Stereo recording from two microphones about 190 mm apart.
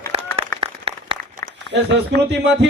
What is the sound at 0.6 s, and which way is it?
Applause, 30° right (ahead or behind).